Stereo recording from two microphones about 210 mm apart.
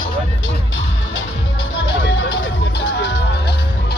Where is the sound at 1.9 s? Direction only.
60° left (ahead or behind).